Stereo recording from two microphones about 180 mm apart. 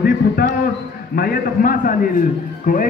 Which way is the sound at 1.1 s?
55° left (ahead or behind).